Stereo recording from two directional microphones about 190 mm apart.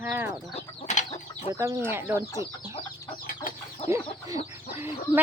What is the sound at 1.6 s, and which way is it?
Speech, 10° right (ahead or behind).